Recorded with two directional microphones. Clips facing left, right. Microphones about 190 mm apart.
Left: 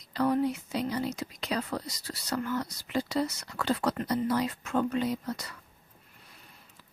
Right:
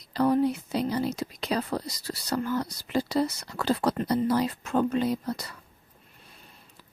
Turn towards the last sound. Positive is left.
turn(degrees=-35)  # may be behind; listen again after turning